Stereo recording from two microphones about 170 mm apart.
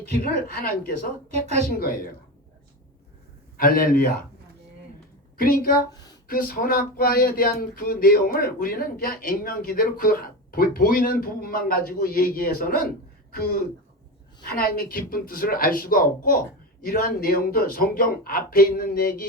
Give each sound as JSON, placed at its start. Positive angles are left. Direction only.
{"t": 0.2, "sound": "speech", "side_deg": 60}
{"t": 3.6, "sound": "speech", "side_deg": 60}
{"t": 5.4, "sound": "speech", "side_deg": 55}
{"t": 5.9, "sound": "a sound", "side_deg": 20}
{"t": 6.2, "sound": "speech", "side_deg": 55}
{"t": 14.4, "sound": "speech", "side_deg": 60}